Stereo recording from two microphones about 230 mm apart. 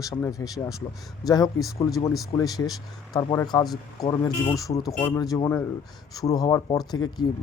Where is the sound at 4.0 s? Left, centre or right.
Centre.